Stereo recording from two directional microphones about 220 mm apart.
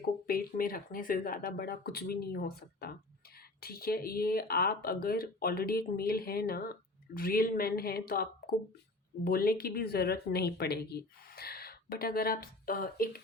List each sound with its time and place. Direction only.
0.3 s speech: 40° left (ahead or behind)